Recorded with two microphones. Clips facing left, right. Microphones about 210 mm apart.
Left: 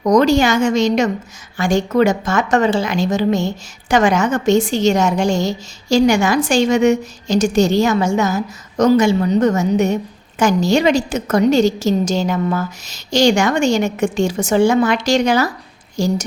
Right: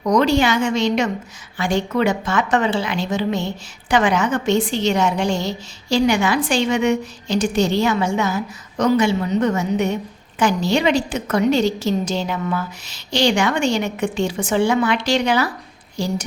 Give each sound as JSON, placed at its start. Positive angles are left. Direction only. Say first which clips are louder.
{"t": 0.0, "sound": "a woman's voice", "louder": "left 4 dB", "side_deg": 45}